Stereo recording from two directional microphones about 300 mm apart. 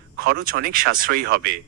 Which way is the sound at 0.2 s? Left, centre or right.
Right.